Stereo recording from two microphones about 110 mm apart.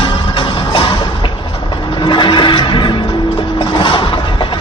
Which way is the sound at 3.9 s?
50° left (ahead or behind).